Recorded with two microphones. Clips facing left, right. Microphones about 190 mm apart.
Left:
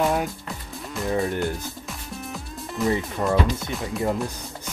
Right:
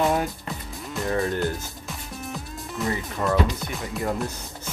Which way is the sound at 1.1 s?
15° left (ahead or behind).